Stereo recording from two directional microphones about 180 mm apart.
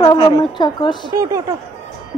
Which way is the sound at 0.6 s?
25° left (ahead or behind).